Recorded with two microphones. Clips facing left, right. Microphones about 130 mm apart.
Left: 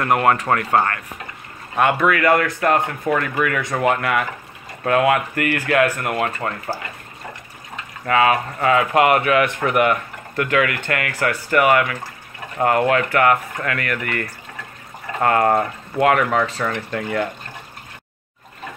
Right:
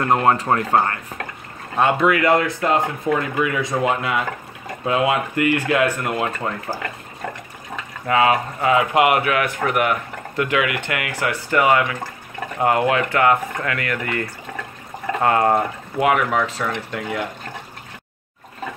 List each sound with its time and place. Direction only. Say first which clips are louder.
0.0 s speech: even; 25° right (ahead or behind)
1.8 s speech: even; 25° right (ahead or behind)
8.1 s speech: even; 20° right (ahead or behind)
9.2 s speech: left 3 dB; centre (ahead or behind)
10.3 s speech: left 1 dB; 15° right (ahead or behind)